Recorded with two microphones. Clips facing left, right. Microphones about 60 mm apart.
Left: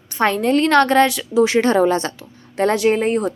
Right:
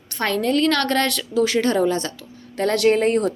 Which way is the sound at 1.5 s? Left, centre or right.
Left.